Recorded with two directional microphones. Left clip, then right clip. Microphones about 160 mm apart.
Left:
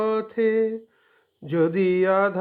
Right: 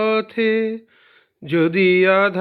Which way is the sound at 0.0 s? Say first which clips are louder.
Right 4 dB; 20° right (ahead or behind).